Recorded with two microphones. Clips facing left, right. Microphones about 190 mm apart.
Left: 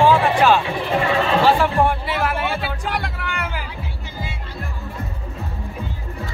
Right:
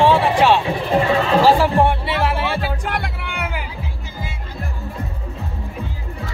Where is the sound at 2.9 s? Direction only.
5° right (ahead or behind).